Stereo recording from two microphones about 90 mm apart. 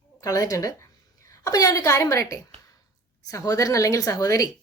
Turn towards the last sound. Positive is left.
turn(degrees=40)  # may be behind; listen again after turning